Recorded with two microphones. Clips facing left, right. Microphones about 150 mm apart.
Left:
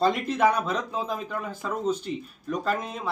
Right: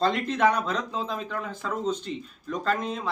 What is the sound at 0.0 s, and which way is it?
Speech, 10° left (ahead or behind).